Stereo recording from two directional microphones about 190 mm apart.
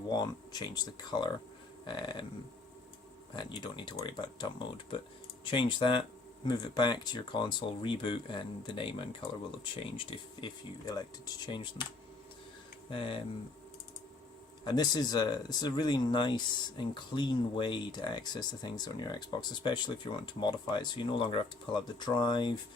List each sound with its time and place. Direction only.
0.1 s speech: 20° left (ahead or behind)
3.3 s speech: 25° left (ahead or behind)
5.5 s speech: 25° left (ahead or behind)
12.9 s speech: 25° left (ahead or behind)
14.6 s speech: 20° left (ahead or behind)